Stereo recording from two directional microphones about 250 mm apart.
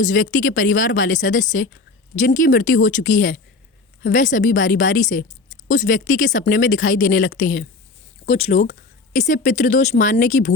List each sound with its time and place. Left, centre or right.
0.0 s a woman's voice: left